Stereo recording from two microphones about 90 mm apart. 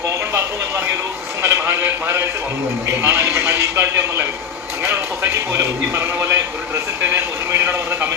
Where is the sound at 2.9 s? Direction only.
30° right (ahead or behind).